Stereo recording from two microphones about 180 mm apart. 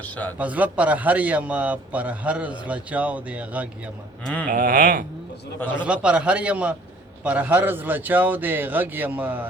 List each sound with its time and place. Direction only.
0.0 s a man's voice: 10° left (ahead or behind)
0.3 s a man's voice: 10° right (ahead or behind)
4.5 s a sound: 50° right (ahead or behind)
5.8 s a man's voice: 5° right (ahead or behind)